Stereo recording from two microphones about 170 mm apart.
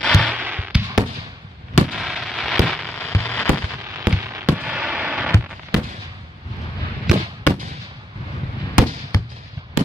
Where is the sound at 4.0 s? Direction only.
15° right (ahead or behind).